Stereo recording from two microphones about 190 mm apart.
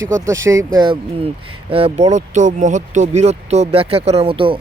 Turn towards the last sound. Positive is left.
turn(degrees=-30)  # may be behind; listen again after turning